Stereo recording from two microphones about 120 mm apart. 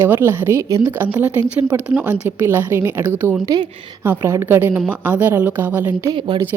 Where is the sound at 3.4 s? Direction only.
35° right (ahead or behind).